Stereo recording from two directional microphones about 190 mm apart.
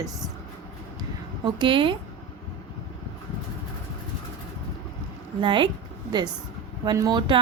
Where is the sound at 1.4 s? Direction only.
25° right (ahead or behind).